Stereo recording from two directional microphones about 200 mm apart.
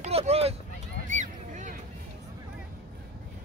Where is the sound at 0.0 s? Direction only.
30° right (ahead or behind).